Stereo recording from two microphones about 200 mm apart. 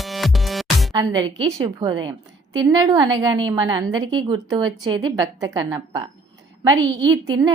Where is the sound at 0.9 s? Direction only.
20° right (ahead or behind).